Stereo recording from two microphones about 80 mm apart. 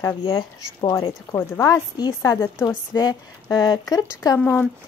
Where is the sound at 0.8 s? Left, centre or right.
Left.